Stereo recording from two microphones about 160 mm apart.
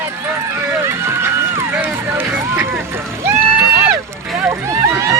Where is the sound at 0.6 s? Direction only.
15° right (ahead or behind).